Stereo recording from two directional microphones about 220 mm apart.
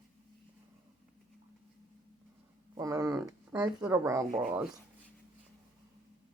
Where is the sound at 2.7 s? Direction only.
15° right (ahead or behind).